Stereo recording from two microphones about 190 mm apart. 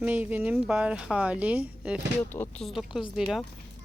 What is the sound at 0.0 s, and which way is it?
Speech, 10° right (ahead or behind).